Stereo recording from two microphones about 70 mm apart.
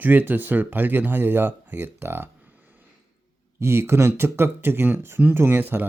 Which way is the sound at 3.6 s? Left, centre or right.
Right.